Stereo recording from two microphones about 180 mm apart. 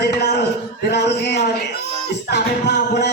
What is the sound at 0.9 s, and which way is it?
Music, 70° left (ahead or behind).